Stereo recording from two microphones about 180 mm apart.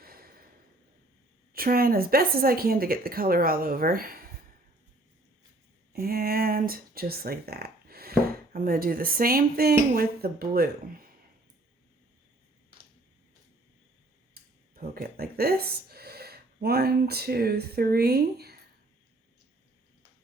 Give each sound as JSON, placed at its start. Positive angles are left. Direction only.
{"t": 0.0, "sound": "a sound", "side_deg": -55}
{"t": 1.5, "sound": "speech", "side_deg": -55}
{"t": 5.9, "sound": "speech", "side_deg": -55}
{"t": 14.3, "sound": "speech", "side_deg": -55}